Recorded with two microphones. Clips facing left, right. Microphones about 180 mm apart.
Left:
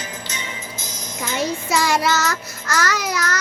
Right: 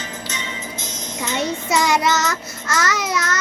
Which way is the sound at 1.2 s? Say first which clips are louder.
Even; 25° right (ahead or behind).